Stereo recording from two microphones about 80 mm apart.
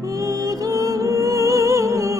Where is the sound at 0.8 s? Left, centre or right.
Right.